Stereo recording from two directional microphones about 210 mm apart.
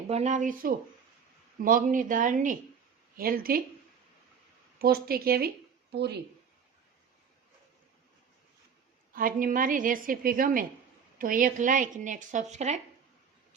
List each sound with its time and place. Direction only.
0.1 s a woman's voice: 30° right (ahead or behind)
4.8 s a woman's voice: 45° right (ahead or behind)
9.1 s speech: 40° right (ahead or behind)